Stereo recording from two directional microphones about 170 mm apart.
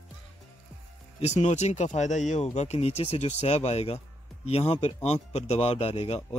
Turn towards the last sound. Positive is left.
turn(degrees=35)  # may be behind; listen again after turning